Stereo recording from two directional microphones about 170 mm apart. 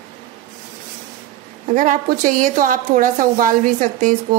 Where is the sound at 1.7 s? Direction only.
50° right (ahead or behind).